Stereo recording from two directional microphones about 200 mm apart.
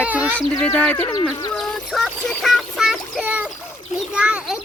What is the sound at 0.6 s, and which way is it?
Speech, 5° left (ahead or behind).